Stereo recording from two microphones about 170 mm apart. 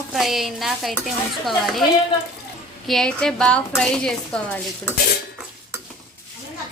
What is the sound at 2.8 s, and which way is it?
A woman's voice, centre (ahead or behind).